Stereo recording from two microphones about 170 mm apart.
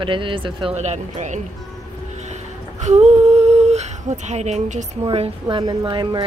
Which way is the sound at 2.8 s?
40° right (ahead or behind).